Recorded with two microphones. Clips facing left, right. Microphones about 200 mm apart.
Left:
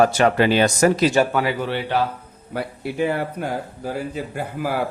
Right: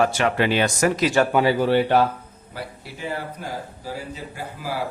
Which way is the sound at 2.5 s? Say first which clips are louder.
Left 8 dB; 60° left (ahead or behind).